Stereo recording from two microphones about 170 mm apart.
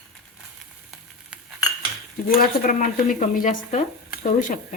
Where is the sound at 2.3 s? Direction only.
50° left (ahead or behind).